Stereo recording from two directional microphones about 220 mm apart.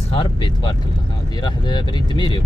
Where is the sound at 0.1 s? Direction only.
25° left (ahead or behind).